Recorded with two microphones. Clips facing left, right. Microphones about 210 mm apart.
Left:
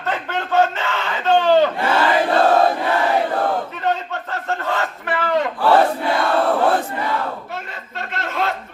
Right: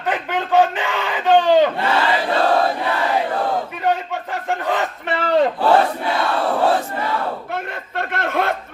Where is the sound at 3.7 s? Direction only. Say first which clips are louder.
Right 2 dB; 15° right (ahead or behind); by 5.5 s 30° right (ahead or behind).